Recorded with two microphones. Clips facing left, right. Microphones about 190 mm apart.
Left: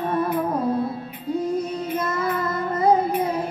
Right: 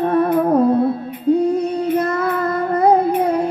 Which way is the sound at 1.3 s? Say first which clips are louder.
Right 7 dB; 65° right (ahead or behind).